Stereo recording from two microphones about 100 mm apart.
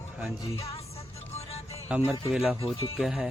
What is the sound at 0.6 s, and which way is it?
Music, 75° left (ahead or behind).